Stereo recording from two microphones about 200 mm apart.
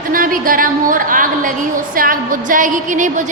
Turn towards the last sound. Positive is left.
turn(degrees=-40)  # may be behind; listen again after turning